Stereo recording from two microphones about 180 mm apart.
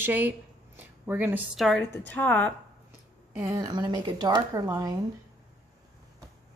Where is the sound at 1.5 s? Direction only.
Centre (ahead or behind).